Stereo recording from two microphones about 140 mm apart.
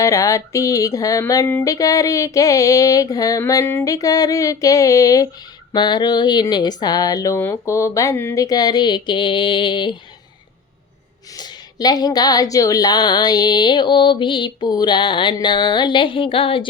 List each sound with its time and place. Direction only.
0.0 s speech: 20° left (ahead or behind)
11.3 s speech: 30° left (ahead or behind)